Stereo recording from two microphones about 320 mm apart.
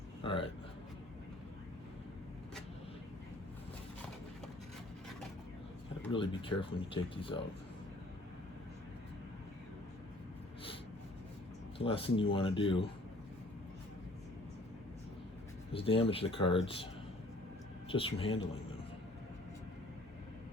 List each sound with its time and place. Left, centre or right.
0.2 s speech: centre
6.0 s speech: centre
11.8 s speech: centre
15.7 s speech: centre
17.8 s speech: centre